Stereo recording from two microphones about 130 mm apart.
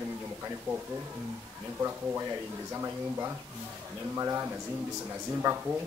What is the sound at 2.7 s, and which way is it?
Speech, 20° right (ahead or behind).